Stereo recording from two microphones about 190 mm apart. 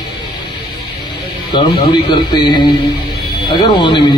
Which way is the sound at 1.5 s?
25° left (ahead or behind).